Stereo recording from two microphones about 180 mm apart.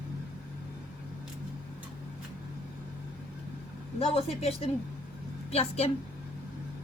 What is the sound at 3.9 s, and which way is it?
Speech, 35° left (ahead or behind).